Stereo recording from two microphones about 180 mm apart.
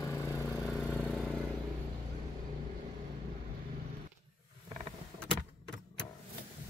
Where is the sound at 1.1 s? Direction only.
5° left (ahead or behind).